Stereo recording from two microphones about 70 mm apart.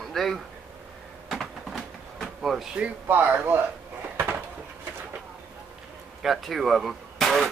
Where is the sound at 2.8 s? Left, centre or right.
Right.